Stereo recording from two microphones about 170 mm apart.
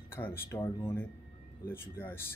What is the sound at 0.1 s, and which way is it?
Speech, 15° left (ahead or behind).